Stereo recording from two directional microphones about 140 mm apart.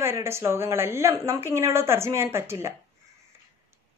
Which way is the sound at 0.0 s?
20° right (ahead or behind).